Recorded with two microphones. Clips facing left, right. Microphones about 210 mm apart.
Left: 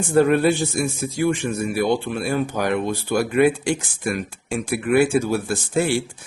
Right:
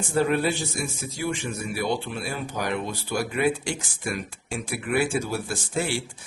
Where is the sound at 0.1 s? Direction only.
55° left (ahead or behind).